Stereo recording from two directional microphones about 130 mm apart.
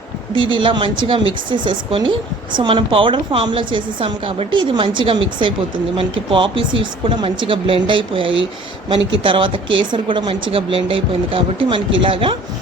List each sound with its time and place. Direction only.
0.3 s speech: 40° right (ahead or behind)